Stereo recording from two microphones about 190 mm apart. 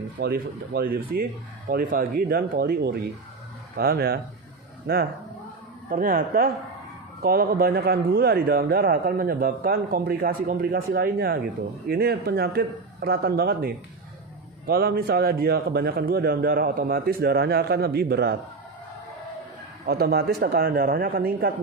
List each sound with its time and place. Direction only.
0.2 s a man's voice: 55° right (ahead or behind)
14.7 s a man's voice: 55° right (ahead or behind)
19.8 s a man's voice: 55° right (ahead or behind)